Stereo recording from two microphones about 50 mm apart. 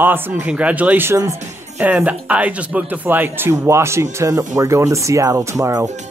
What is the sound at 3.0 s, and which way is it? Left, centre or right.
Speech, right.